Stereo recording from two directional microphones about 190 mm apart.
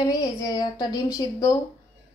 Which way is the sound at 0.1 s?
20° left (ahead or behind).